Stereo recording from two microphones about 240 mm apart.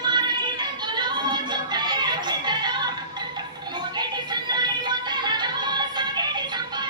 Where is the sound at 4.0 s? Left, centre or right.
Centre.